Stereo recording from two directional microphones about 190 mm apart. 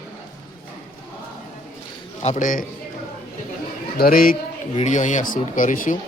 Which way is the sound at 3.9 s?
50° left (ahead or behind).